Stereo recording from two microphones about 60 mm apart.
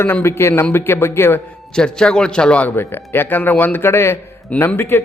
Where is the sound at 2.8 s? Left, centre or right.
Left.